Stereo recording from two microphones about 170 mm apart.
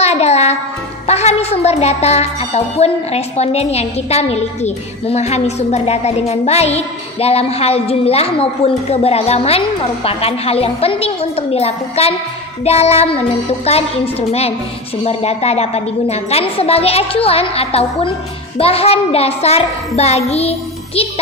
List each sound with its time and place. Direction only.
0.0 s music: 40° left (ahead or behind)